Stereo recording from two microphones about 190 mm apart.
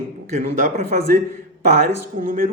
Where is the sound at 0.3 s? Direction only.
40° right (ahead or behind).